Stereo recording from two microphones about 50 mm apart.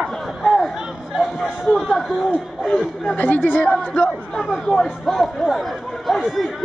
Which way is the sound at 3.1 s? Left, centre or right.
Left.